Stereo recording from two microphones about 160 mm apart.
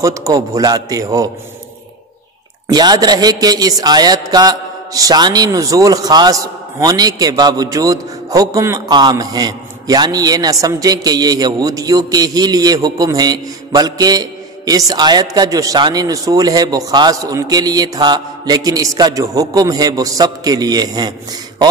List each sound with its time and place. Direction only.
0.0 s a man's voice: 20° right (ahead or behind)
2.7 s a man's voice: 25° right (ahead or behind)